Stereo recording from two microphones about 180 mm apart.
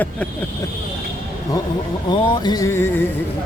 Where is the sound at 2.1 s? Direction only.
25° left (ahead or behind).